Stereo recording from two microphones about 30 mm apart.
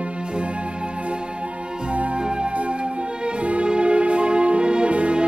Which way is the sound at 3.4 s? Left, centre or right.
Right.